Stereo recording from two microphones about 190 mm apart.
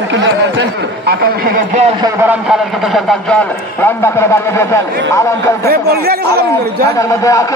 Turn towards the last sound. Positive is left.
turn(degrees=15)  # may be behind; listen again after turning